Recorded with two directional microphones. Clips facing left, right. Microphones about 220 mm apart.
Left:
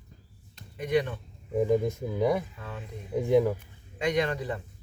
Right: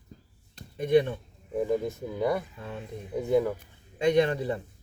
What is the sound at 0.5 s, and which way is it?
Chop, 30° right (ahead or behind).